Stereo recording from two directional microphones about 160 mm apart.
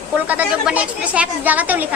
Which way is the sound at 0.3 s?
10° right (ahead or behind).